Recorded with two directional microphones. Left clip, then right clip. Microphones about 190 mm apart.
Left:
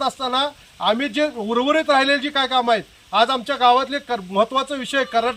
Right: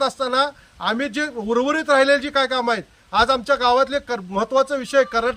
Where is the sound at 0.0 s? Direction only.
10° right (ahead or behind).